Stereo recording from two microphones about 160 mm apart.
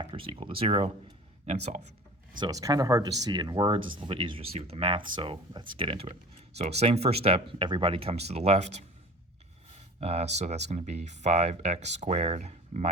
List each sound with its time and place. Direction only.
0.0 s speech: 35° right (ahead or behind)
2.4 s speech: 20° right (ahead or behind); by 8.8 s 45° right (ahead or behind)
10.0 s speech: 40° right (ahead or behind)